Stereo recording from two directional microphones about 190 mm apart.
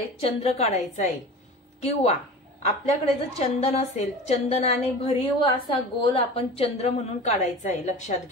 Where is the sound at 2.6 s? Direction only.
35° left (ahead or behind).